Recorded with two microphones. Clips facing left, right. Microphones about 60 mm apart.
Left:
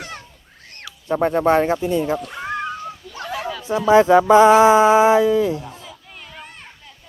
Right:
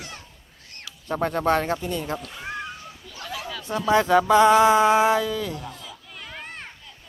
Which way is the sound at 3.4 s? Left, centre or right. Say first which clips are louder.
Left 6 dB; centre.